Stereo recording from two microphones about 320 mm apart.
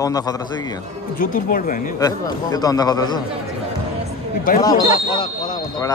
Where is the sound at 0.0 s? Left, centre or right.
Centre.